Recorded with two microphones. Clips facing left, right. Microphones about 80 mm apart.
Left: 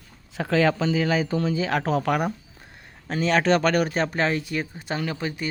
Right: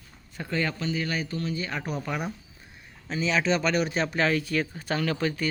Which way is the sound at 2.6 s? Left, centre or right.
Left.